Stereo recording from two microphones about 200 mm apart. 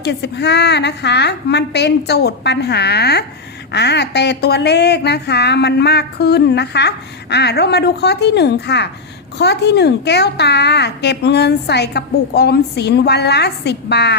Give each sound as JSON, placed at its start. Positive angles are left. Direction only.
{"t": 0.0, "sound": "speech", "side_deg": 55}